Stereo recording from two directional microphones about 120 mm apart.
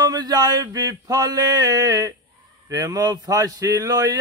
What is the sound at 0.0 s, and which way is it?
Speech, 35° right (ahead or behind).